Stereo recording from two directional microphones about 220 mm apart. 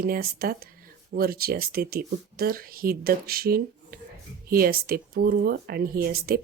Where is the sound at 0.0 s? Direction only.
40° right (ahead or behind).